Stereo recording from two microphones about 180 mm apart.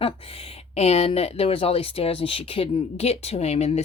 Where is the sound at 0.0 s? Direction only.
35° left (ahead or behind).